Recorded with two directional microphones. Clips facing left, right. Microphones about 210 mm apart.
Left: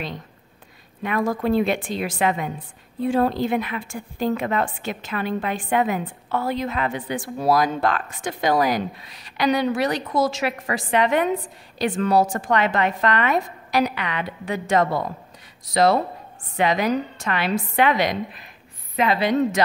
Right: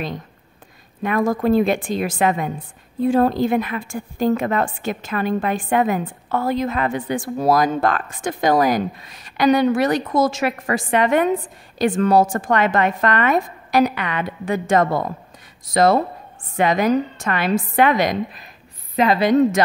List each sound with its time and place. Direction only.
1.0 s a woman's voice: 45° right (ahead or behind)